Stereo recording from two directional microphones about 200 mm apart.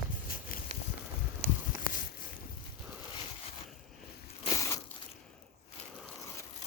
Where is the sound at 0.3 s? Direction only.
45° left (ahead or behind).